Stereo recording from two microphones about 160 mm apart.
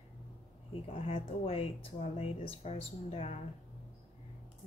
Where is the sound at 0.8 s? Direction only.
40° left (ahead or behind).